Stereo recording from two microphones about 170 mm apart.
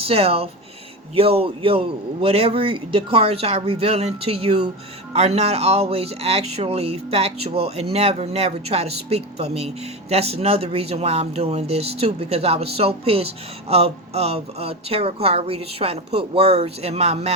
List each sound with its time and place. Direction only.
0.1 s speech: 35° right (ahead or behind)